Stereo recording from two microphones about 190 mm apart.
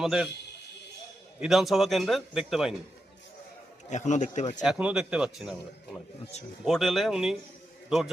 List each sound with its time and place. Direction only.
0.0 s a man's voice: centre (ahead or behind)
1.4 s a man's voice: centre (ahead or behind)
3.8 s speech: 40° left (ahead or behind)
4.6 s a man's voice: 5° right (ahead or behind)